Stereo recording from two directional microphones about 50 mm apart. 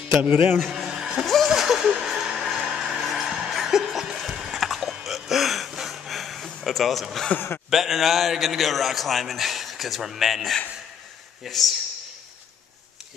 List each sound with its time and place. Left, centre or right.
0.2 s a man's voice: right
0.6 s a sound: centre
1.2 s music: centre
1.5 s music: centre
4.9 s a sound: centre
7.3 s speech: left
7.7 s a man's voice: centre